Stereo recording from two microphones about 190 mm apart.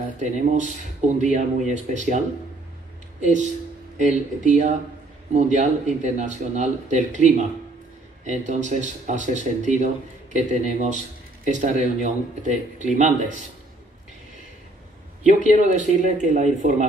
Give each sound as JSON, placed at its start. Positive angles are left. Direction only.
{"t": 0.2, "sound": "speech", "side_deg": -40}
{"t": 3.2, "sound": "speech", "side_deg": -40}
{"t": 15.2, "sound": "speech", "side_deg": -40}